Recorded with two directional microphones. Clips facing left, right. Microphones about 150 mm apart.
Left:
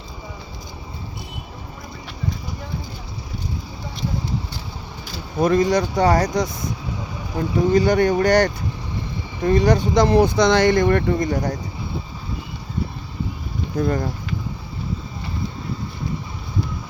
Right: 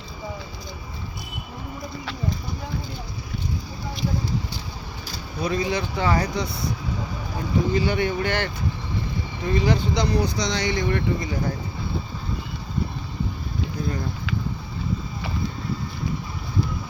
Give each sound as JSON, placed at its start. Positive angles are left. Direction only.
{"t": 5.4, "sound": "speech", "side_deg": 45}
{"t": 7.7, "sound": "speech", "side_deg": 40}
{"t": 13.8, "sound": "speech", "side_deg": 50}